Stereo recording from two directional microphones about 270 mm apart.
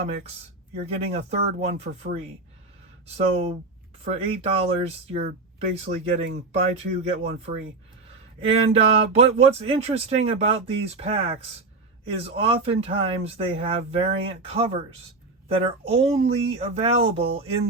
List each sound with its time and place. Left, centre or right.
0.9 s speech: right
3.2 s speech: right